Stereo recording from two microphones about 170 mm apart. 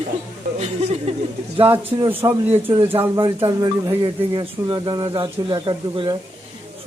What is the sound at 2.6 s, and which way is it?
Speech, 30° right (ahead or behind).